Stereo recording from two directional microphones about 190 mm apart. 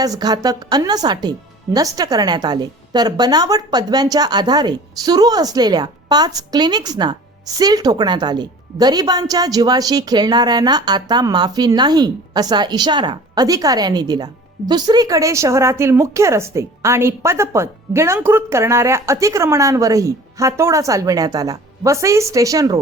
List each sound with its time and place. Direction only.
0.0 s a woman's voice: 20° right (ahead or behind)